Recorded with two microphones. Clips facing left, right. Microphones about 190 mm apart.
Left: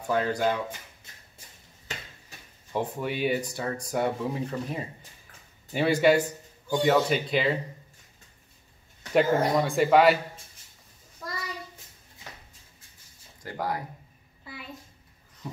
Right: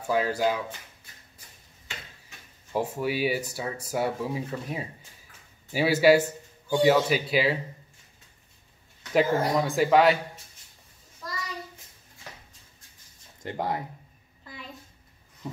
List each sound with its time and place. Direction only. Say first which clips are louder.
0.0 s speech: right 1 dB; 5° right (ahead or behind)
2.7 s speech: right 2 dB; 5° right (ahead or behind)
9.1 s speech: left 1 dB; centre (ahead or behind)
13.4 s speech: right 1 dB; 25° right (ahead or behind)
14.4 s a sound: left 1 dB; 5° left (ahead or behind)